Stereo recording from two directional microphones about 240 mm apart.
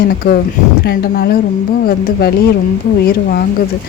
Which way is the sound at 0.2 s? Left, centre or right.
Left.